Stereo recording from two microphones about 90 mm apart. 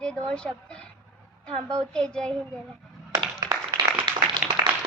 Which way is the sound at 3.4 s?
40° right (ahead or behind).